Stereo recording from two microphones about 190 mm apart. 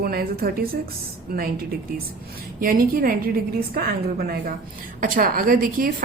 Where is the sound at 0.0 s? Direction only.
55° right (ahead or behind).